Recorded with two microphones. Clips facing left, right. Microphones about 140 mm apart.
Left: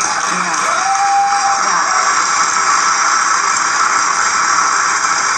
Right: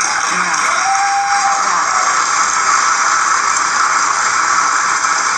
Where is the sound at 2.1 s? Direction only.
15° right (ahead or behind).